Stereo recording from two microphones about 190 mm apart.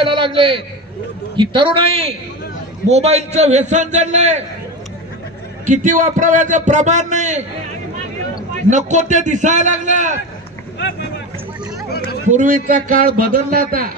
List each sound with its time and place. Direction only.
0.0 s a man's voice: 25° right (ahead or behind)
5.7 s a man's voice: 40° right (ahead or behind)
8.6 s a man's voice: 40° right (ahead or behind)
12.3 s a man's voice: 45° right (ahead or behind)